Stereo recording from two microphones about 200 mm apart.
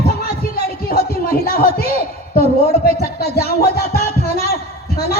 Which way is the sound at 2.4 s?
50° left (ahead or behind).